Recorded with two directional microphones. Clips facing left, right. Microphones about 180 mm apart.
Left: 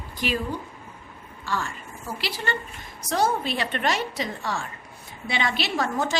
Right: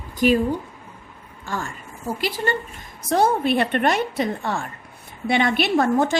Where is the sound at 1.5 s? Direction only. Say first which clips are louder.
Even; 50° right (ahead or behind).